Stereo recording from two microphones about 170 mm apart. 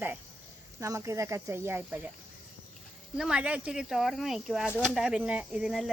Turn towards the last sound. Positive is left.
turn(degrees=-5)  # may be behind; listen again after turning